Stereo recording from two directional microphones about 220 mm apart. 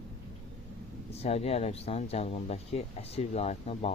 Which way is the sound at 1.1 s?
30° left (ahead or behind).